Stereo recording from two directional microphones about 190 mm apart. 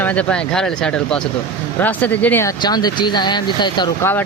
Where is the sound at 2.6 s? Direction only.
20° left (ahead or behind).